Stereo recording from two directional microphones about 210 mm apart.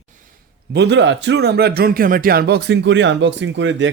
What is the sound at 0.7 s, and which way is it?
Speech, 55° right (ahead or behind).